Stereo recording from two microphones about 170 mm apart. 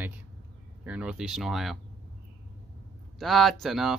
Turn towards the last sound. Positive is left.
turn(degrees=0)  # may be behind; listen again after turning